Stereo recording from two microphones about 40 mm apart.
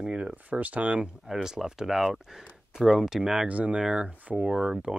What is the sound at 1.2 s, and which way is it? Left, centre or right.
Speech, centre.